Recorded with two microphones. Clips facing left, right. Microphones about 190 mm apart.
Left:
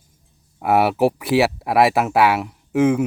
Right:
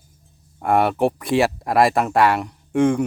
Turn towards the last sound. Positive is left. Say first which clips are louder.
# left 1 dB
turn(degrees=5)  # may be behind; listen again after turning